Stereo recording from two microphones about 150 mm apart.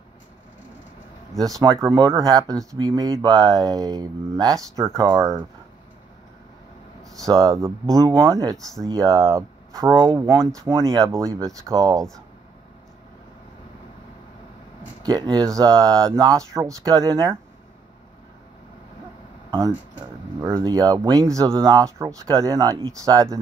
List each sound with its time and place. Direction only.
1.4 s speech: 25° right (ahead or behind)
7.2 s speech: 25° right (ahead or behind)
15.0 s speech: 25° right (ahead or behind)
20.3 s speech: 20° right (ahead or behind)